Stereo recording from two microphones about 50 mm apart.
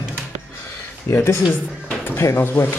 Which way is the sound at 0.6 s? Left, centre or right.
Left.